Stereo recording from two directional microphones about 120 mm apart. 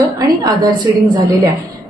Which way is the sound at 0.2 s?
35° right (ahead or behind).